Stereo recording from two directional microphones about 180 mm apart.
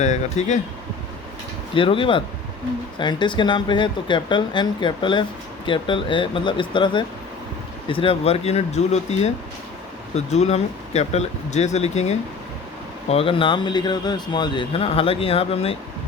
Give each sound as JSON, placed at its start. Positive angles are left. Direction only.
{"t": 0.0, "sound": "speech", "side_deg": 40}
{"t": 1.7, "sound": "speech", "side_deg": 30}